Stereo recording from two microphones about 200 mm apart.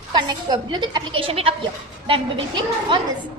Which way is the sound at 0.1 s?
20° right (ahead or behind).